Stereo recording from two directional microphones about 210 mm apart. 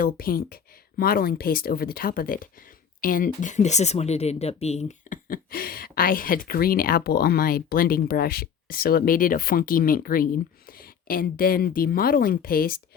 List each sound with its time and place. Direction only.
0.0 s speech: 45° left (ahead or behind)